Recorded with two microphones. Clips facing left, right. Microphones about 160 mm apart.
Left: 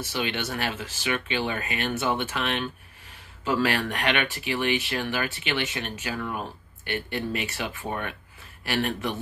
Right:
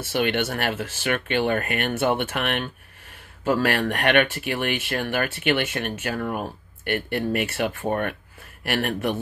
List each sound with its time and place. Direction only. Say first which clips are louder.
0.0 s speech: right 6 dB; 55° right (ahead or behind)